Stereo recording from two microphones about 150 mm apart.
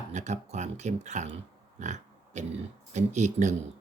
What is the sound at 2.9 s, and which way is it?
Speech, 50° right (ahead or behind).